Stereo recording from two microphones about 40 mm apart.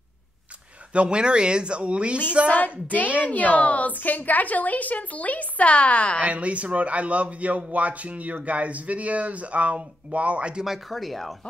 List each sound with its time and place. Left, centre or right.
0.9 s speech: right
3.3 s a woman's voice: left
6.2 s a man's voice: right
10.6 s speech: centre